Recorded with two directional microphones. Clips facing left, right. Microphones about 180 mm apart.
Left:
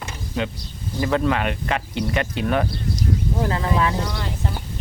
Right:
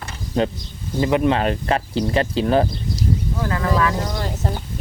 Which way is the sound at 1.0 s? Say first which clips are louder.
Right 3 dB; 20° right (ahead or behind).